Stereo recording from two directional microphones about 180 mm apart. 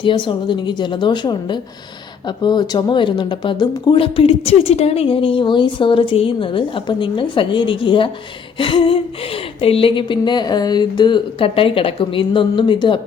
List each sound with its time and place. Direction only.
0.0 s a woman's voice: 25° left (ahead or behind)